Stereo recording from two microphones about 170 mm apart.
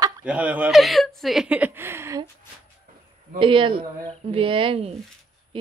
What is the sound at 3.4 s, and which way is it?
A woman's voice, 30° right (ahead or behind).